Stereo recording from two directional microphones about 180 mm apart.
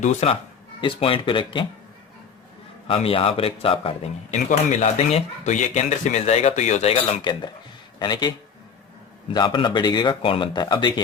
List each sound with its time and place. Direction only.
0.0 s a man's voice: 35° left (ahead or behind)
2.8 s a man's voice: 30° left (ahead or behind)
9.3 s speech: 25° left (ahead or behind)